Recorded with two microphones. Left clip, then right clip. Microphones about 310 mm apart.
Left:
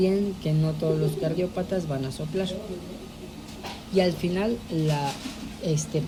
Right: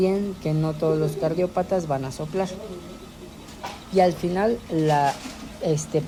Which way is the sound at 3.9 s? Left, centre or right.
Centre.